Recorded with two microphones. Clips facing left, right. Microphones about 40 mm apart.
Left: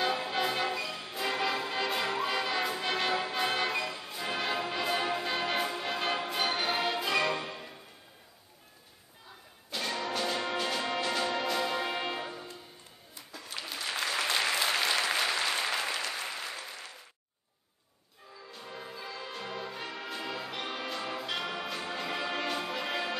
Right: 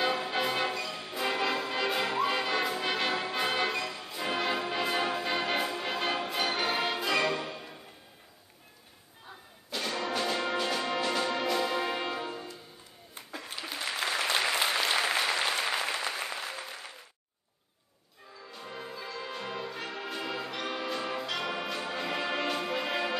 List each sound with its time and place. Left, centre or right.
0.0 s music: centre
9.7 s music: centre
13.1 s a sound: right
13.9 s applause: centre
14.3 s applause: centre
16.0 s applause: right
18.5 s music: centre